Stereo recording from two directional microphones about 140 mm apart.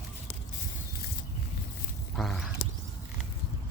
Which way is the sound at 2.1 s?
5° left (ahead or behind).